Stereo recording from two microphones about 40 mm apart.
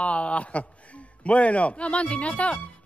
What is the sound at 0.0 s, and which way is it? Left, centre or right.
A man's voice, left.